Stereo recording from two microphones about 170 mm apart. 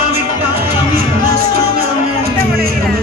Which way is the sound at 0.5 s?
60° right (ahead or behind).